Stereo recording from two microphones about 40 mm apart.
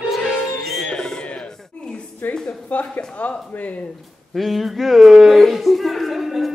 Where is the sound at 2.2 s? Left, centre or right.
Left.